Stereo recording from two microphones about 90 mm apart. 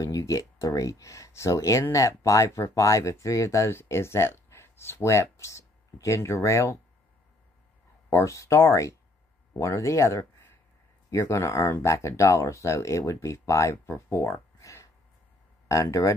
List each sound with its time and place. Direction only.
0.0 s speech: 35° left (ahead or behind)
8.1 s speech: 35° left (ahead or behind)